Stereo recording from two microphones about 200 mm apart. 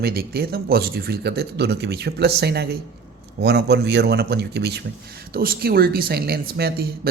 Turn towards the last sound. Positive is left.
turn(degrees=-50)  # may be behind; listen again after turning